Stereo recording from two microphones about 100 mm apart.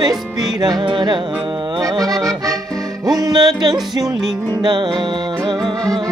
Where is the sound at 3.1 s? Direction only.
40° right (ahead or behind).